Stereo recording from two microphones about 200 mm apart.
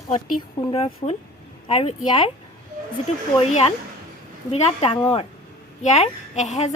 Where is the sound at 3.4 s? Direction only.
30° left (ahead or behind).